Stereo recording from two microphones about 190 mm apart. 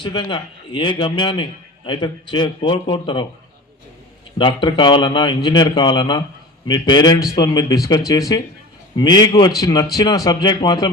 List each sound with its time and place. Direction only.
0.0 s a man's voice: 25° left (ahead or behind)
4.4 s a man's voice: 25° left (ahead or behind)